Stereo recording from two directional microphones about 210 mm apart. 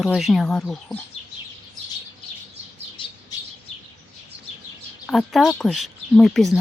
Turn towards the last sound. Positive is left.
turn(degrees=0)  # may be behind; listen again after turning